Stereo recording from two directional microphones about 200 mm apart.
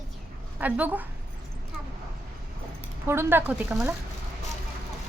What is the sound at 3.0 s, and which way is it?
Speech, 10° right (ahead or behind).